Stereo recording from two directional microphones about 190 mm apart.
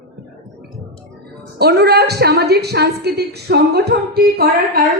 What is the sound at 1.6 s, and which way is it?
A woman's voice, 60° right (ahead or behind).